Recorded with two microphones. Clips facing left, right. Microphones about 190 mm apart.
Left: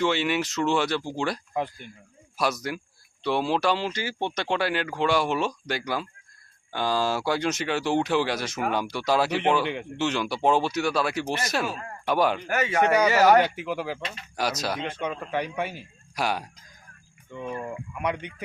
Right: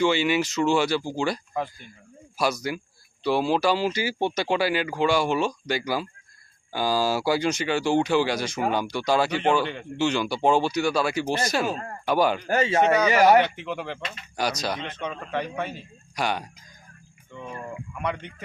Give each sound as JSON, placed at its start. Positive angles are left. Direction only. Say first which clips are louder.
{"t": 0.0, "sound": "speech", "louder": "right 3 dB", "side_deg": 0}
{"t": 2.4, "sound": "speech", "louder": "right 2 dB", "side_deg": 0}
{"t": 11.7, "sound": "speech", "louder": "right 4 dB", "side_deg": -40}
{"t": 12.0, "sound": "speech", "louder": "right 1 dB", "side_deg": 0}
{"t": 12.5, "sound": "speech", "louder": "right 2 dB", "side_deg": -30}
{"t": 13.1, "sound": "speech", "louder": "right 1 dB", "side_deg": -15}
{"t": 13.4, "sound": "speech", "louder": "left 1 dB", "side_deg": 5}
{"t": 17.9, "sound": "speech", "louder": "left 1 dB", "side_deg": 10}